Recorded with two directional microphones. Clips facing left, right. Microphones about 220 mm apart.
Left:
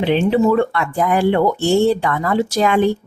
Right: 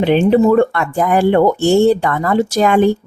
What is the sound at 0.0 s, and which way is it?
Speech, 50° right (ahead or behind).